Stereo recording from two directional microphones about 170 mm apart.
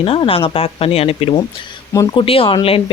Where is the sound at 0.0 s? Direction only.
35° left (ahead or behind).